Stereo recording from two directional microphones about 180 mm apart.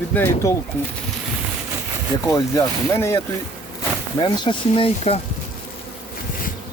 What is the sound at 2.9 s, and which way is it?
Speech, 15° left (ahead or behind).